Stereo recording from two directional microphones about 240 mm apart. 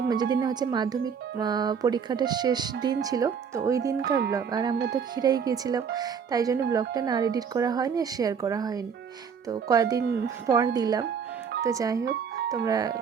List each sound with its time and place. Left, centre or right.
0.1 s speech: centre